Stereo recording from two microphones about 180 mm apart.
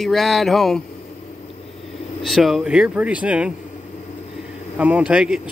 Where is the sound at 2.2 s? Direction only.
Centre (ahead or behind).